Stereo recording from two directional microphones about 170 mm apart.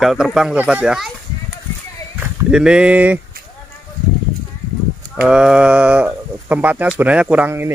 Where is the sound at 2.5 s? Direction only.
5° right (ahead or behind).